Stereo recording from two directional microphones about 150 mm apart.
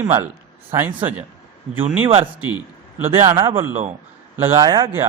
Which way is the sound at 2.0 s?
40° right (ahead or behind).